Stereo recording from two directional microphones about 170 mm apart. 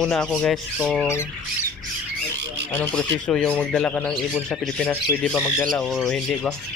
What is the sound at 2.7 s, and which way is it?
Speech, 5° left (ahead or behind).